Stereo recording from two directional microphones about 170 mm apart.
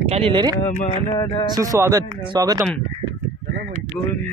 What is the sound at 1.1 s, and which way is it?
Speech, 30° left (ahead or behind).